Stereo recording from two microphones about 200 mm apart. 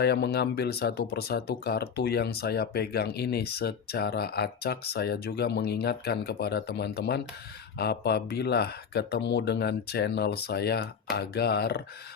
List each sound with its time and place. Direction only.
0.0 s speech: 55° left (ahead or behind)